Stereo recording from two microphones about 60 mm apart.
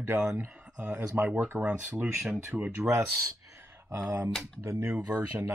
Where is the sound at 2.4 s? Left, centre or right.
Right.